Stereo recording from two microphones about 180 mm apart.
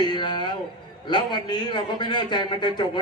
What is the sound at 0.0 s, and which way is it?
Music, 25° left (ahead or behind).